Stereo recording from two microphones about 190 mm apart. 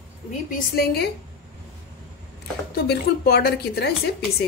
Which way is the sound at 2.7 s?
55° left (ahead or behind).